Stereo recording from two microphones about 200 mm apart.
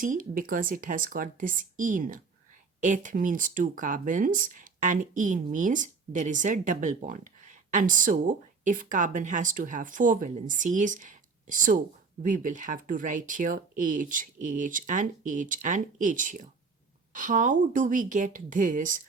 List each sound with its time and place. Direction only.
0.0 s speech: 45° right (ahead or behind)